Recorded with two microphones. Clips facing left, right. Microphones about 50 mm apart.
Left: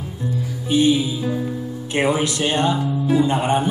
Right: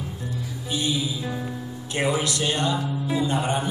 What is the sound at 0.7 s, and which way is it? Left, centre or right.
Speech, left.